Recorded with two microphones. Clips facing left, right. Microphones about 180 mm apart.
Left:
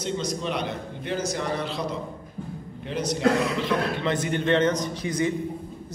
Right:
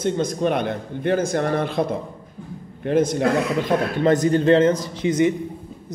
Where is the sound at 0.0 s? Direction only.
50° right (ahead or behind).